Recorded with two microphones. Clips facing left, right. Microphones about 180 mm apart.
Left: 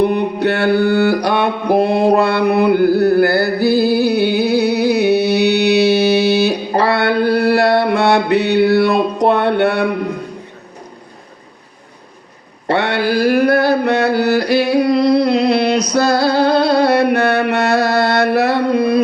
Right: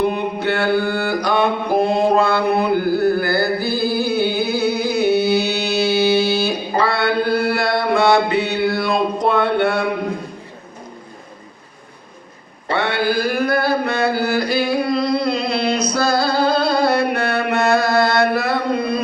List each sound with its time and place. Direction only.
0.0 s mantra: 65° left (ahead or behind)
3.6 s music: 65° left (ahead or behind)
6.7 s mantra: 65° left (ahead or behind)
12.6 s a sound: 65° left (ahead or behind)
15.9 s music: 65° left (ahead or behind)